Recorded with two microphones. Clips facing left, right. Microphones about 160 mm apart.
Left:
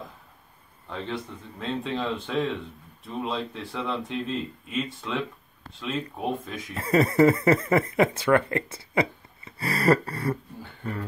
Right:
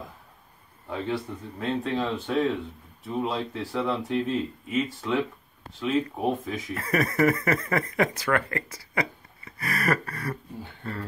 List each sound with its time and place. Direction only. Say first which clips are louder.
0.8 s speech: right 3 dB; 5° right (ahead or behind)
6.7 s speech: left 5 dB; 25° left (ahead or behind)
10.8 s speech: left 3 dB; 15° left (ahead or behind)